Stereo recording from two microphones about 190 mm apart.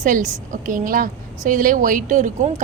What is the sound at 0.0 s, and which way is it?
A woman's voice, 45° right (ahead or behind).